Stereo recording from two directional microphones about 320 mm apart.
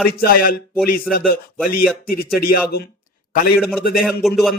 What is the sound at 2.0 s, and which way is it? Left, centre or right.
Speech, left.